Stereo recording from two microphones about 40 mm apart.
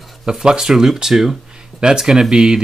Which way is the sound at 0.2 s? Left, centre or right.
Centre.